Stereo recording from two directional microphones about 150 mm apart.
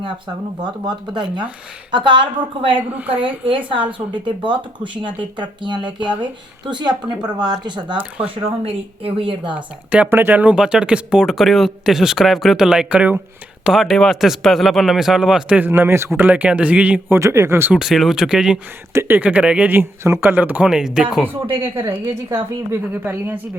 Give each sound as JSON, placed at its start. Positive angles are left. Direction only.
{"t": 0.6, "sound": "speech", "side_deg": -30}
{"t": 2.7, "sound": "speech", "side_deg": -10}
{"t": 4.1, "sound": "speech", "side_deg": -30}
{"t": 9.6, "sound": "speech", "side_deg": -10}
{"t": 17.7, "sound": "speech", "side_deg": 0}
{"t": 21.6, "sound": "speech", "side_deg": -20}